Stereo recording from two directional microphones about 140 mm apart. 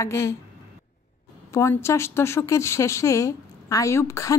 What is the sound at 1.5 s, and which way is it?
Speech, 20° left (ahead or behind).